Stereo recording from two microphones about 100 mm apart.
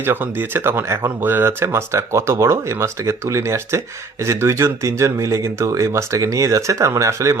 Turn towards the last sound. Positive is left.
turn(degrees=-30)  # may be behind; listen again after turning